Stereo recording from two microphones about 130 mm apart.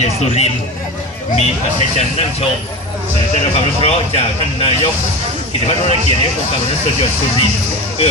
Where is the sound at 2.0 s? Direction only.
55° left (ahead or behind).